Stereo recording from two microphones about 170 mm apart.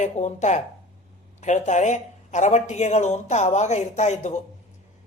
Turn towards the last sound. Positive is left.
turn(degrees=40)  # may be behind; listen again after turning